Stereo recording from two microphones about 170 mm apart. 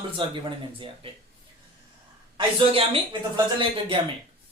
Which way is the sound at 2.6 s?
30° right (ahead or behind).